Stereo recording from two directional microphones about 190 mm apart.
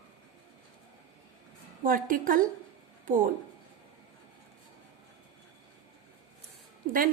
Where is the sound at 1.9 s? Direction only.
45° right (ahead or behind).